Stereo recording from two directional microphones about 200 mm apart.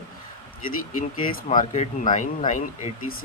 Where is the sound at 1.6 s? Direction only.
40° left (ahead or behind).